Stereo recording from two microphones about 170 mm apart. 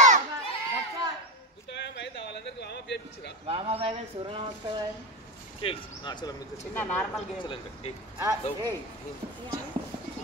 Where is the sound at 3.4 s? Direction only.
35° right (ahead or behind).